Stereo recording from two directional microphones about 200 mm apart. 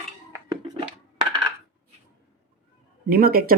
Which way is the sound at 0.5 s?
20° right (ahead or behind).